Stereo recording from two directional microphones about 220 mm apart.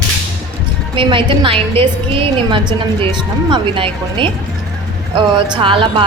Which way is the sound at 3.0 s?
20° right (ahead or behind).